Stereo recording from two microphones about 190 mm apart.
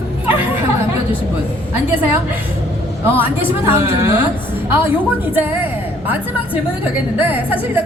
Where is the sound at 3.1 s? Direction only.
10° right (ahead or behind).